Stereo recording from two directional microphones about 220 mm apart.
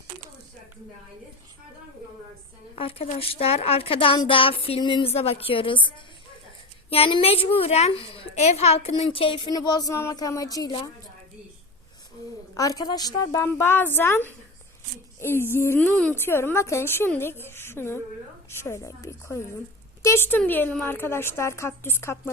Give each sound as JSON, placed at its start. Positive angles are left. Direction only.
{"t": 2.7, "sound": "speech", "side_deg": 25}
{"t": 6.9, "sound": "a woman's voice", "side_deg": 25}
{"t": 12.5, "sound": "a woman's voice", "side_deg": 15}